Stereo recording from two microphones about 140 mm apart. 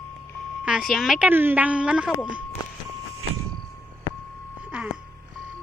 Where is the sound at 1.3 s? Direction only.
15° right (ahead or behind).